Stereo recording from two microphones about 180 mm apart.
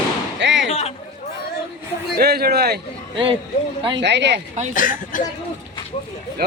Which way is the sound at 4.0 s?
70° right (ahead or behind).